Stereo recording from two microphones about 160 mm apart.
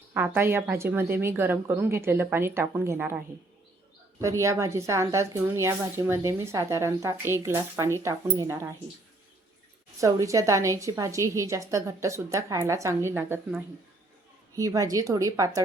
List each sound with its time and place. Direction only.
0.1 s a woman's voice: 15° right (ahead or behind)
10.0 s speech: 20° right (ahead or behind)
14.5 s speech: 20° right (ahead or behind)